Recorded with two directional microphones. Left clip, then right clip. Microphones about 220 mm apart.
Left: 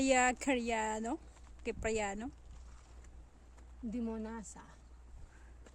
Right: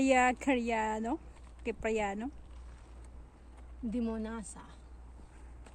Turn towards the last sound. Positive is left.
turn(degrees=25)  # may be behind; listen again after turning